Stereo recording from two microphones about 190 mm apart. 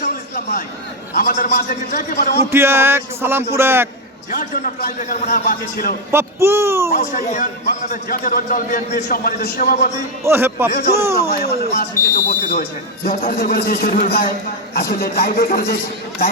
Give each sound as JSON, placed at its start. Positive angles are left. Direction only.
{"t": 0.0, "sound": "a sound", "side_deg": 50}
{"t": 1.1, "sound": "speech", "side_deg": 50}
{"t": 2.5, "sound": "a man's voice", "side_deg": -10}
{"t": 4.3, "sound": "speech", "side_deg": 45}
{"t": 6.1, "sound": "a man's voice", "side_deg": -15}
{"t": 7.0, "sound": "speech", "side_deg": 40}
{"t": 10.2, "sound": "a man's voice", "side_deg": -10}
{"t": 10.7, "sound": "speech", "side_deg": 50}